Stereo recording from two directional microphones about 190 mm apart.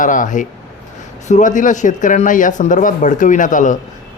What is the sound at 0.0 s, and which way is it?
Speech, 45° left (ahead or behind).